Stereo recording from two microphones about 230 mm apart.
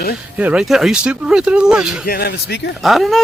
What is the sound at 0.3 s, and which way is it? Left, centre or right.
Speech, centre.